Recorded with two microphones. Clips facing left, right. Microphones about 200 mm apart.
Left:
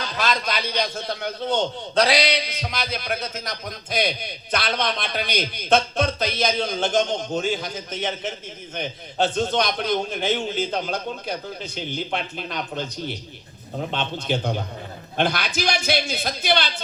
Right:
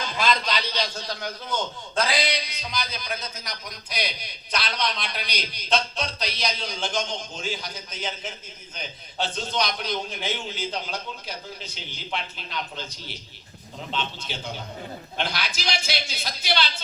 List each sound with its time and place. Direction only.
0.4 s a man's voice: 55° left (ahead or behind)